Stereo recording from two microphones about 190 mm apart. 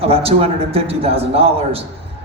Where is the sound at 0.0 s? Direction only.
30° right (ahead or behind).